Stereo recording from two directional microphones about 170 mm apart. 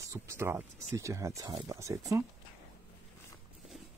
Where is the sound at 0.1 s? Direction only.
15° right (ahead or behind).